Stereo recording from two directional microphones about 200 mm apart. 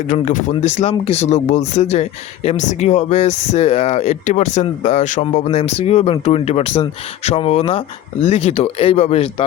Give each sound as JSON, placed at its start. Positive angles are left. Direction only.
{"t": 0.1, "sound": "speech", "side_deg": 40}